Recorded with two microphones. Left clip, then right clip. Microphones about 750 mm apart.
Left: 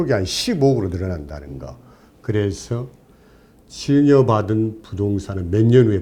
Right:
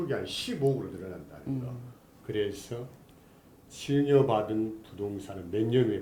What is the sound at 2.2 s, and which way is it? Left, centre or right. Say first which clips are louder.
Speech: left 9 dB; left.